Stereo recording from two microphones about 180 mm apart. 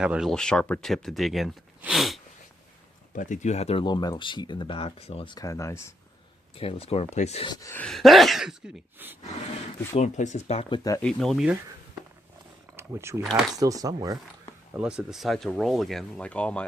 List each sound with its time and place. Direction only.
0.0 s speech: 5° right (ahead or behind)
3.2 s speech: 45° left (ahead or behind)
3.8 s speech: 25° left (ahead or behind)
6.6 s speech: 30° left (ahead or behind)
7.5 s speech: 15° left (ahead or behind)
7.9 s speech: centre (ahead or behind)
9.9 s speech: 40° left (ahead or behind)
11.0 s speech: centre (ahead or behind)
12.7 s speech: 15° right (ahead or behind)
13.2 s speech: centre (ahead or behind)
13.6 s speech: 20° right (ahead or behind)
14.8 s speech: 5° right (ahead or behind)